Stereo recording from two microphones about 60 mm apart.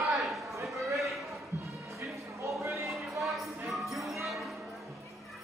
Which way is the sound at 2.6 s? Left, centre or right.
Right.